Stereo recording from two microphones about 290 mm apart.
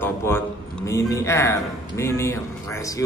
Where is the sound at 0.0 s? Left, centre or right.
Centre.